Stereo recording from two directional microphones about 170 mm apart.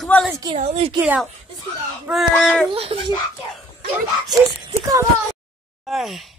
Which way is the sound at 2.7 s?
35° right (ahead or behind).